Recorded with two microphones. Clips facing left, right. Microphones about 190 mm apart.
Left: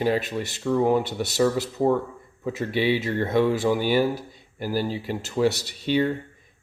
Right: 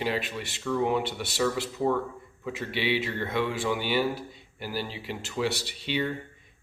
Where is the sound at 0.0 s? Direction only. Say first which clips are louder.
Left 6 dB; 40° left (ahead or behind).